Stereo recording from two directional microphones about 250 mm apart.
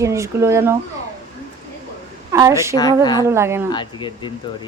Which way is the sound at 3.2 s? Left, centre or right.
Centre.